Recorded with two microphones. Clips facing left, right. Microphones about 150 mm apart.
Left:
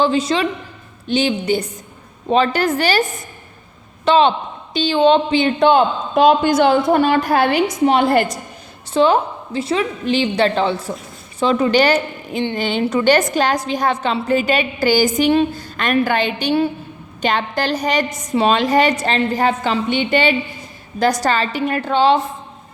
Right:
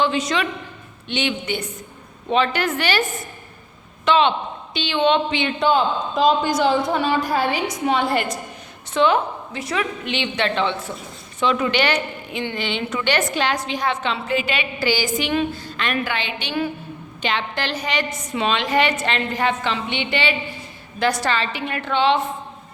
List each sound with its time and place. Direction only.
0.0 s a woman's voice: 35° left (ahead or behind)
5.6 s a woman's voice: 60° left (ahead or behind)
8.1 s a woman's voice: 40° left (ahead or behind)